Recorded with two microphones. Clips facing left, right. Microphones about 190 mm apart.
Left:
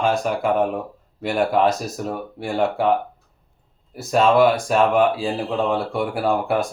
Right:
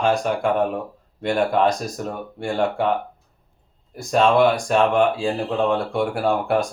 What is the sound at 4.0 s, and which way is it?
Speech, 5° left (ahead or behind).